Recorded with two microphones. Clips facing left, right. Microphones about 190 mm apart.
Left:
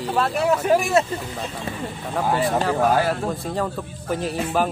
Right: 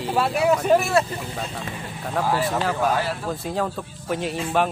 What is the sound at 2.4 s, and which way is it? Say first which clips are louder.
Speech: left 3 dB; centre (ahead or behind).